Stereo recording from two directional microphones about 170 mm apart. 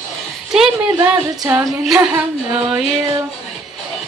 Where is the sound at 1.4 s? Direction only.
20° right (ahead or behind).